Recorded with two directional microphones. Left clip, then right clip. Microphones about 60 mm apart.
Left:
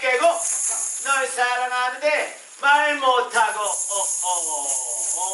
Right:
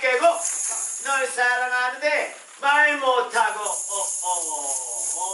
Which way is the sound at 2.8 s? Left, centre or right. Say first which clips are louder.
Even; right.